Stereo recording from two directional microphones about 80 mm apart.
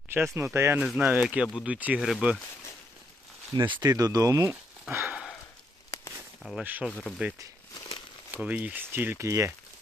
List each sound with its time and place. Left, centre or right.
0.1 s speech: right
0.8 s speech: centre
1.0 s speech: centre
2.0 s speech: centre
3.5 s speech: right
3.8 s speech: right
4.9 s sniff: right
6.6 s speech: right
7.7 s crumpling: left
8.3 s speech: centre
9.2 s speech: right